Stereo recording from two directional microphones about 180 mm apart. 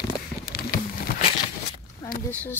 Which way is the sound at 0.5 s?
60° left (ahead or behind).